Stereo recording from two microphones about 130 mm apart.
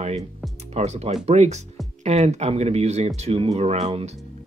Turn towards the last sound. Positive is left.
turn(degrees=-55)  # may be behind; listen again after turning